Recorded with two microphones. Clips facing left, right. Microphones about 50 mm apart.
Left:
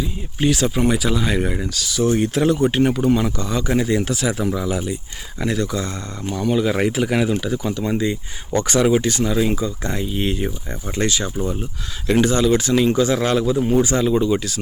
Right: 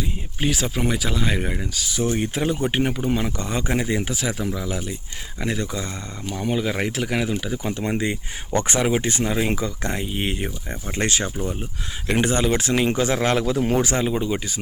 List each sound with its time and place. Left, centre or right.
0.3 s speech: centre
1.7 s speech: centre
3.3 s speech: right
4.1 s speech: centre
5.4 s speech: centre
6.7 s speech: centre
7.6 s speech: right
8.7 s speech: right
9.6 s speech: right
9.9 s speech: right
13.4 s speech: right
13.9 s speech: right